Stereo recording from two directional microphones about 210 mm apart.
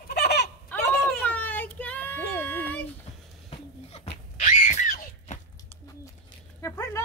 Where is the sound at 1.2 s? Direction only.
10° left (ahead or behind).